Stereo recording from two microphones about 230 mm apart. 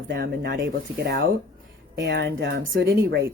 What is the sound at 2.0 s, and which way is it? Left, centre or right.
Speech, right.